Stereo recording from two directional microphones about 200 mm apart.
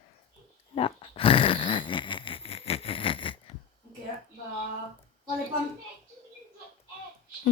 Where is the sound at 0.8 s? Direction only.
30° left (ahead or behind).